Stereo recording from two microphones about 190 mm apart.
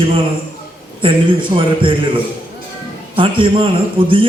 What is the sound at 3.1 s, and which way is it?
Speech, 25° right (ahead or behind).